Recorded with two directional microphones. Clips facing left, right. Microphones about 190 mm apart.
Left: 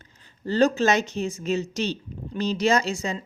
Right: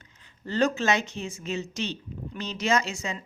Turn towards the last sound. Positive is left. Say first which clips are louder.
# left 4 dB
turn(degrees=35)  # may be behind; listen again after turning